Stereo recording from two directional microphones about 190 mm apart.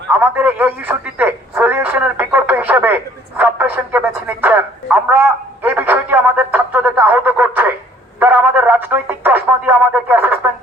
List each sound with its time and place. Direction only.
0.1 s speech: 10° right (ahead or behind)